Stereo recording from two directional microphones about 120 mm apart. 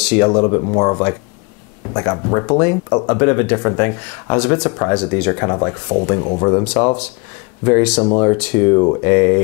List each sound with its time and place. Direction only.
0.0 s speech: 10° left (ahead or behind)
7.8 s speech: 10° left (ahead or behind)
8.1 s speech: 20° left (ahead or behind)